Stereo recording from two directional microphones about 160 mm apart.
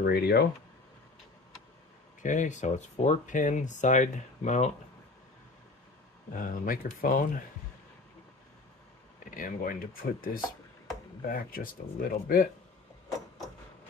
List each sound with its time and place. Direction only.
0.0 s speech: 90° left
2.2 s speech: 50° left (ahead or behind)
6.3 s speech: 60° left (ahead or behind)
9.3 s speech: 60° left (ahead or behind)